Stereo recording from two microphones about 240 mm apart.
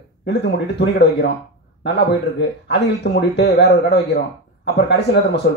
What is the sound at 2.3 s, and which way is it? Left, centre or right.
Speech, left.